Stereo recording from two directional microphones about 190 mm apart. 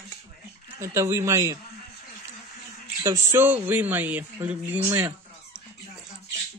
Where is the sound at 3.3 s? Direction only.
10° right (ahead or behind).